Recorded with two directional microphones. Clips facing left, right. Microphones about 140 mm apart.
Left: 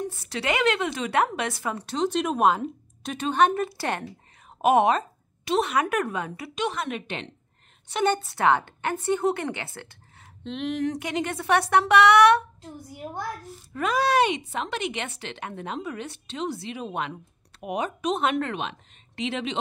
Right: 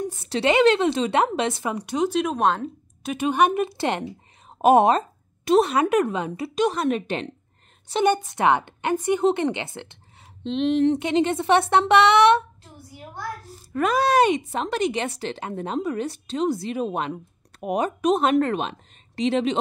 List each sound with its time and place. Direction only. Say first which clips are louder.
0.3 s a woman's voice: right 7 dB; 30° right (ahead or behind); by 3.1 s 5° left (ahead or behind)
3.1 s speech: right 2 dB; 10° right (ahead or behind)
4.6 s speech: right 4 dB; 35° right (ahead or behind)
6.5 s speech: right 7 dB; 40° right (ahead or behind)
8.0 s a woman's voice: right 3 dB; 15° right (ahead or behind)
13.7 s speech: right 3 dB; 45° right (ahead or behind)